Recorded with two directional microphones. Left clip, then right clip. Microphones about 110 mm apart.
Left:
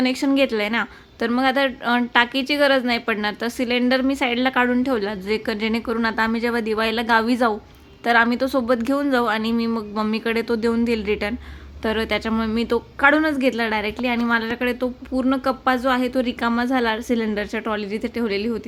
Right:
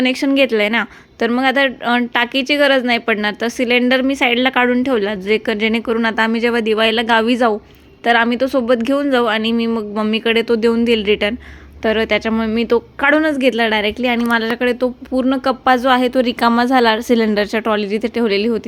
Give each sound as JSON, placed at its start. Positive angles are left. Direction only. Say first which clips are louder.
{"t": 0.0, "sound": "speech", "louder": "right 5 dB", "side_deg": -25}